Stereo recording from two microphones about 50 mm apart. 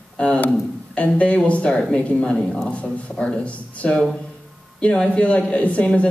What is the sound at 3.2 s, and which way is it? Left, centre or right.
Speech, left.